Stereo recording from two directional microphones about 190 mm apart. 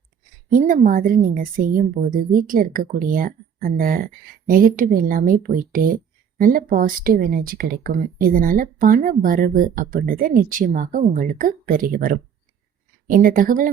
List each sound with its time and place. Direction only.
0.5 s speech: 45° right (ahead or behind)